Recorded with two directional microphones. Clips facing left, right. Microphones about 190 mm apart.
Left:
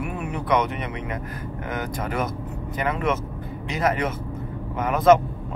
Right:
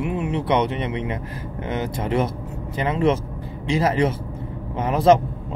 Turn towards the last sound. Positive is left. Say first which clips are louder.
# right 1 dB
turn(degrees=-30)  # may be behind; listen again after turning